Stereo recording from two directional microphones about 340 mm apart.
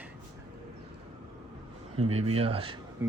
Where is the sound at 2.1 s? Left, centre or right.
Centre.